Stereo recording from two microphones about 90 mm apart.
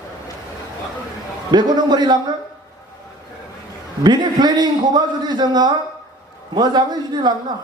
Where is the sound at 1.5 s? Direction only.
55° right (ahead or behind).